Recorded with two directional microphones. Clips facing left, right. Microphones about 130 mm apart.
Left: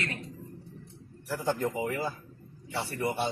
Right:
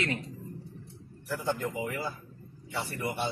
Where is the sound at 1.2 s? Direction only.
25° left (ahead or behind).